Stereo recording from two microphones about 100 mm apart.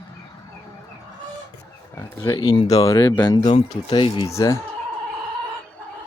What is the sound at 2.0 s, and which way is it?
Speech, 30° left (ahead or behind).